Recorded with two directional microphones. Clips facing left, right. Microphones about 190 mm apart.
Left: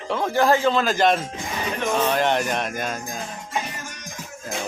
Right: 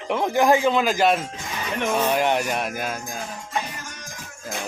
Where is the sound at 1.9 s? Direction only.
10° right (ahead or behind).